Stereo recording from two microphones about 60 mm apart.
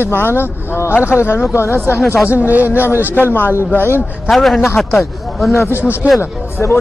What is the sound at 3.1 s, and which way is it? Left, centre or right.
Speech, left.